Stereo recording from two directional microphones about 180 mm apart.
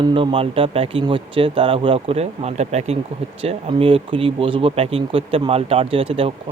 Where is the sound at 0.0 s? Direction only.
30° right (ahead or behind).